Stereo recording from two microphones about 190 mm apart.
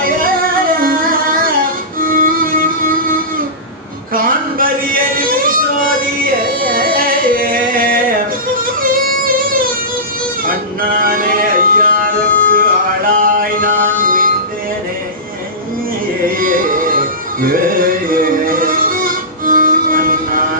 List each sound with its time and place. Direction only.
2.0 s music: 50° right (ahead or behind)
4.1 s a sound: 50° right (ahead or behind)
5.1 s music: 50° right (ahead or behind)
10.8 s music: 50° right (ahead or behind)
16.4 s music: 45° right (ahead or behind)